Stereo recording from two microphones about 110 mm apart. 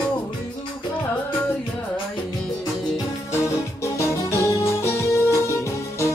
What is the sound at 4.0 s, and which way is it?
Music, 25° left (ahead or behind).